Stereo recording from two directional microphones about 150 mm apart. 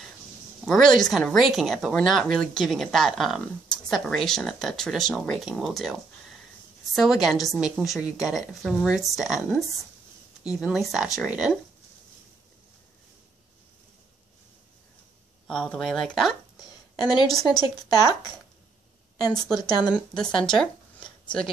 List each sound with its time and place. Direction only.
0.7 s speech: centre (ahead or behind)
7.0 s speech: centre (ahead or behind)
15.4 s speech: 5° left (ahead or behind)
19.5 s speech: 25° left (ahead or behind)
20.2 s speech: 5° left (ahead or behind)